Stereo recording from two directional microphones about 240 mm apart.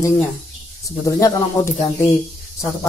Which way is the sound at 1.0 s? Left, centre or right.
Centre.